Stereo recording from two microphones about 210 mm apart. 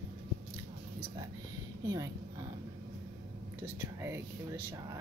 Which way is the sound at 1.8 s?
15° right (ahead or behind).